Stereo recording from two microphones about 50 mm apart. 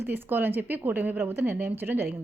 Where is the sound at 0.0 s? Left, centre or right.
Right.